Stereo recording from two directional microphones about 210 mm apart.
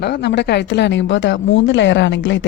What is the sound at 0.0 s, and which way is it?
A woman's voice, 55° left (ahead or behind).